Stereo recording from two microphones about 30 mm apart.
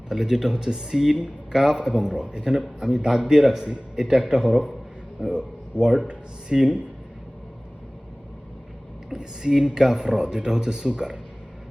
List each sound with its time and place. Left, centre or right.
0.1 s speech: centre
2.5 s speech: centre
3.0 s speech: right; by 6.1 s centre
6.5 s speech: right
9.0 s speech: right